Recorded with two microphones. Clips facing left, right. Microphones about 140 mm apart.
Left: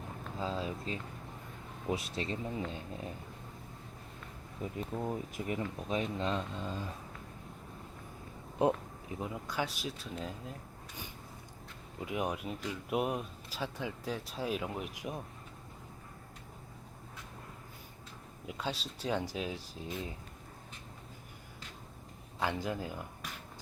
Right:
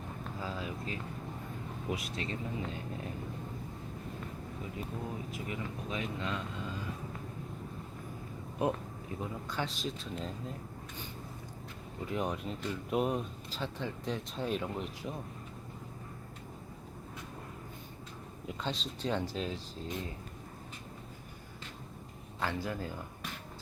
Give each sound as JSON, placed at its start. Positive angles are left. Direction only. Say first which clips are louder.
{"t": 0.3, "sound": "speech", "louder": "left 4 dB", "side_deg": 25}
{"t": 4.6, "sound": "speech", "louder": "left 5 dB", "side_deg": 45}
{"t": 8.5, "sound": "speech", "louder": "left 3 dB", "side_deg": 20}
{"t": 12.0, "sound": "speech", "louder": "even", "side_deg": 10}
{"t": 18.4, "sound": "speech", "louder": "right 1 dB", "side_deg": 10}
{"t": 22.4, "sound": "speech", "louder": "left 1 dB", "side_deg": 15}